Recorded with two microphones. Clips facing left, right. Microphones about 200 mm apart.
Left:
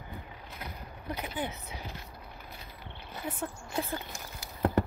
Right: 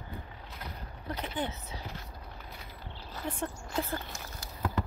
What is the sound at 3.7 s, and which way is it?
Speech, 15° left (ahead or behind).